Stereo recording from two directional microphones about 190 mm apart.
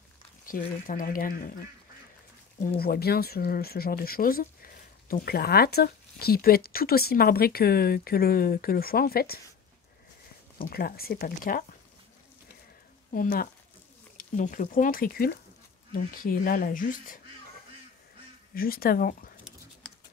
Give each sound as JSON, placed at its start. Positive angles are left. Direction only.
{"t": 0.5, "sound": "speech", "side_deg": 45}
{"t": 2.8, "sound": "speech", "side_deg": 55}
{"t": 10.6, "sound": "speech", "side_deg": 50}
{"t": 13.1, "sound": "speech", "side_deg": 50}
{"t": 18.5, "sound": "speech", "side_deg": 50}